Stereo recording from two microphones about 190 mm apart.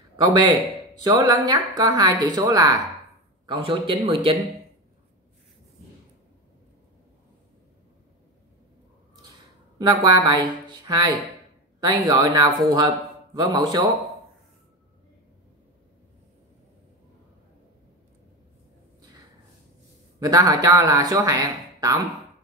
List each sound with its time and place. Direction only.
0.2 s speech: 25° right (ahead or behind)
9.8 s speech: 20° right (ahead or behind)
20.2 s speech: 20° right (ahead or behind)